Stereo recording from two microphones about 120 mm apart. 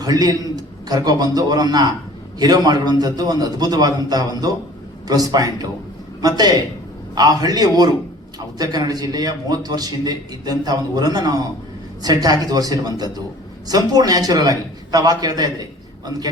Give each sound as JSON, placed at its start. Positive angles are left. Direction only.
{"t": 0.0, "sound": "a man's voice", "side_deg": -30}